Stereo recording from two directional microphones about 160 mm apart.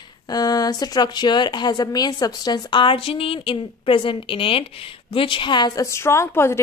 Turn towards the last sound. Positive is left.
turn(degrees=15)  # may be behind; listen again after turning